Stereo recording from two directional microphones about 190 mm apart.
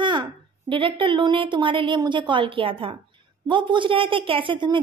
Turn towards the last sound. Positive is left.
turn(degrees=-25)  # may be behind; listen again after turning